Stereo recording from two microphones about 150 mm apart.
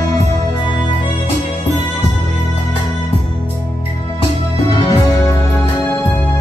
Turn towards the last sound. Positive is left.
turn(degrees=25)  # may be behind; listen again after turning